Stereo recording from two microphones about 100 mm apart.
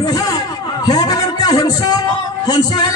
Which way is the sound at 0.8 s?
40° left (ahead or behind).